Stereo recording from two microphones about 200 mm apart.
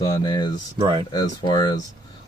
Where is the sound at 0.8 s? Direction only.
20° right (ahead or behind).